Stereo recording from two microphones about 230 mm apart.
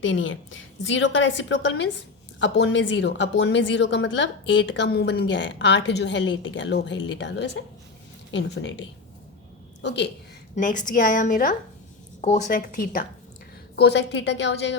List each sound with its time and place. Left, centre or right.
0.0 s a woman's voice: left
9.8 s a woman's voice: left
10.5 s a woman's voice: left
13.7 s a woman's voice: left